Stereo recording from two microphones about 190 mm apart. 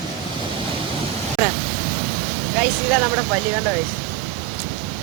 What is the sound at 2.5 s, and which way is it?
Speech, centre (ahead or behind).